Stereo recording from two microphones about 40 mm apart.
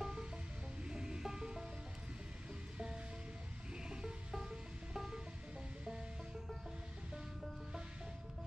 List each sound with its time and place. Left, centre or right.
0.0 s music: centre
3.7 s music: centre